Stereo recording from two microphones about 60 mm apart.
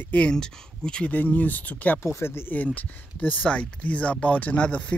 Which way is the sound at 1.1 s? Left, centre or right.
Left.